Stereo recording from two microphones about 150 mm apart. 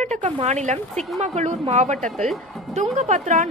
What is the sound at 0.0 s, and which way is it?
A woman's voice, 50° right (ahead or behind).